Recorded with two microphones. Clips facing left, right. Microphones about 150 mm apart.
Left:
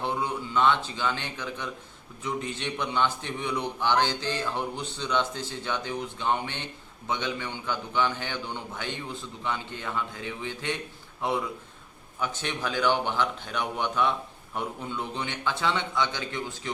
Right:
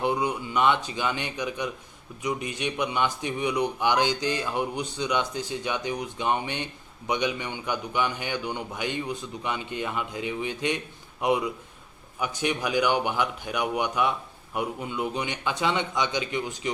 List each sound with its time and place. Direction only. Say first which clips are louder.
0.0 s a man's voice: right 4 dB; 15° right (ahead or behind)